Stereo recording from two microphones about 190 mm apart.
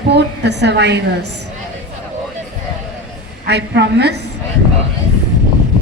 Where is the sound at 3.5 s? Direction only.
65° right (ahead or behind).